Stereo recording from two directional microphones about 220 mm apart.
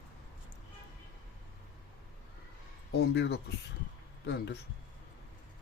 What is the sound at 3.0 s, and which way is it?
Speech, 50° left (ahead or behind).